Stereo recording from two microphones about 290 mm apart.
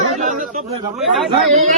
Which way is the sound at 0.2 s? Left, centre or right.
Right.